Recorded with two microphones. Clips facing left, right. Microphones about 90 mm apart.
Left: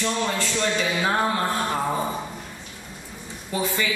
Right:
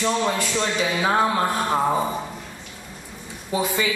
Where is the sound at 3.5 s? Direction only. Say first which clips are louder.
Right 2 dB; 15° right (ahead or behind).